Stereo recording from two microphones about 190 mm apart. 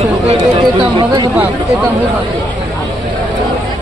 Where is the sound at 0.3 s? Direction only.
30° right (ahead or behind).